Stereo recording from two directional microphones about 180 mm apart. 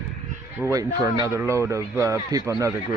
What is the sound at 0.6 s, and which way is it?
Speech, 15° right (ahead or behind).